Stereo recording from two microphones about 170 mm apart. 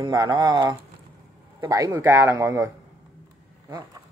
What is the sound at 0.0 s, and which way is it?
Speech, 25° right (ahead or behind).